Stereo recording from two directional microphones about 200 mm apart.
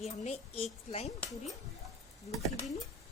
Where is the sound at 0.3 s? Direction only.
30° left (ahead or behind).